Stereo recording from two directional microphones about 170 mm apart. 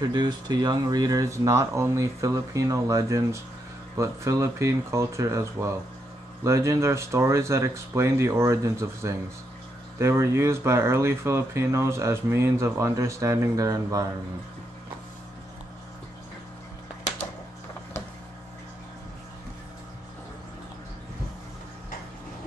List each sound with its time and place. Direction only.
0.1 s speech: 25° right (ahead or behind)